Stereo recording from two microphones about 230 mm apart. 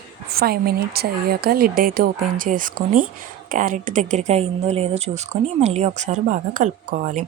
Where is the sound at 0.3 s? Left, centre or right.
Right.